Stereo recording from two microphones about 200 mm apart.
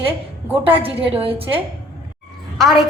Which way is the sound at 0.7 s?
30° right (ahead or behind).